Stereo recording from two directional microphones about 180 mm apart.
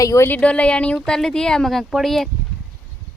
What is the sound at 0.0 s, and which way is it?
Speech, 15° left (ahead or behind).